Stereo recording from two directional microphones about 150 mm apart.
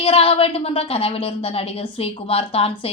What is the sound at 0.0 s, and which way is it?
A woman's voice, 40° left (ahead or behind).